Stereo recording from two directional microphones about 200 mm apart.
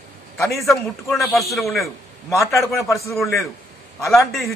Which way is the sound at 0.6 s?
Centre (ahead or behind).